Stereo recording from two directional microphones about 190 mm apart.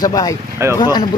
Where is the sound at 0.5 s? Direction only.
15° right (ahead or behind).